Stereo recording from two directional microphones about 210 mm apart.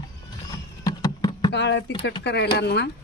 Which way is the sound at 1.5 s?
55° left (ahead or behind).